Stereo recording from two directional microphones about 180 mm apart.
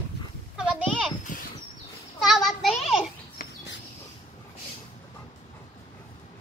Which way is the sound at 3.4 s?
55° left (ahead or behind).